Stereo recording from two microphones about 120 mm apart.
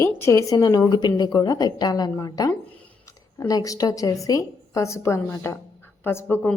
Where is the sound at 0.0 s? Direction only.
20° left (ahead or behind).